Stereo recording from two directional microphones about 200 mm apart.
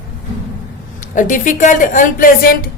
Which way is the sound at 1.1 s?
40° left (ahead or behind).